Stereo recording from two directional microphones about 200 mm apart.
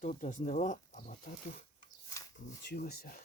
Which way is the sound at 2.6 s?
50° left (ahead or behind).